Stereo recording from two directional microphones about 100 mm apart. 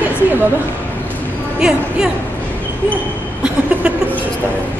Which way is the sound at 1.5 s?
5° right (ahead or behind).